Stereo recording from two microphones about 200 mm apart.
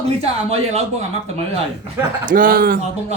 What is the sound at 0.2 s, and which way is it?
Speech, 30° right (ahead or behind).